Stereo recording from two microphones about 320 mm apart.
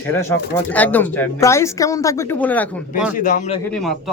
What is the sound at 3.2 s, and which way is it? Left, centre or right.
Speech, left.